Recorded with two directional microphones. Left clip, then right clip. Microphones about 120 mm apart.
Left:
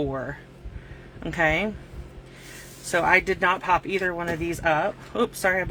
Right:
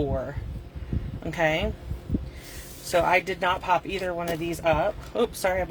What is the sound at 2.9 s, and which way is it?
Speech, 45° left (ahead or behind).